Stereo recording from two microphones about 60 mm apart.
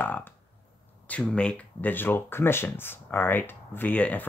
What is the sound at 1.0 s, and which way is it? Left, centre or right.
Speech, left.